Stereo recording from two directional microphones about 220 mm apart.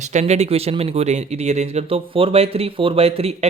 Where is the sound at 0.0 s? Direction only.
30° right (ahead or behind).